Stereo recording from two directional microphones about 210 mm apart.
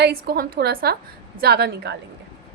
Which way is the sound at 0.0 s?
50° right (ahead or behind).